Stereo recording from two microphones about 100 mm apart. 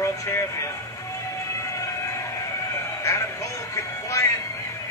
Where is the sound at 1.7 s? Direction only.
30° left (ahead or behind).